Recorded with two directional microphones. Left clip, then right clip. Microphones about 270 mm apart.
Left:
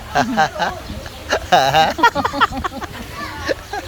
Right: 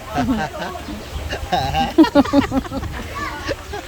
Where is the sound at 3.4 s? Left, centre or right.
Centre.